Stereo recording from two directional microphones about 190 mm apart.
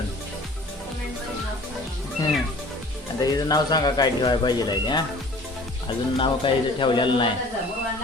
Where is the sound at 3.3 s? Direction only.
20° left (ahead or behind).